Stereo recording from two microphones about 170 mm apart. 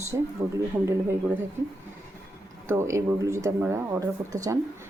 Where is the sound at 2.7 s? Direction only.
15° right (ahead or behind).